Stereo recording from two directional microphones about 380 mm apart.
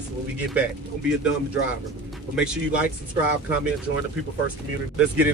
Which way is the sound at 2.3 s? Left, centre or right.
Centre.